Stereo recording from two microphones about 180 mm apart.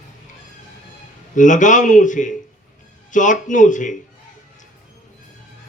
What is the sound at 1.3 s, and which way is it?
A man's voice, 45° left (ahead or behind).